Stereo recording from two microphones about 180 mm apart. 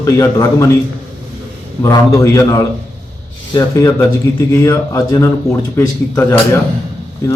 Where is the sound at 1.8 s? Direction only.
20° left (ahead or behind).